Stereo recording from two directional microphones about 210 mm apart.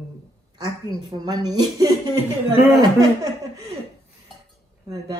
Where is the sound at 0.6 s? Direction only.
20° right (ahead or behind).